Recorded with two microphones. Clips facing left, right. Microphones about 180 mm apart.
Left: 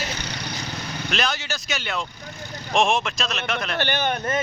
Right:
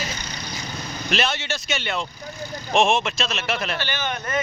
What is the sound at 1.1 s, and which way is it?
Speech, centre (ahead or behind).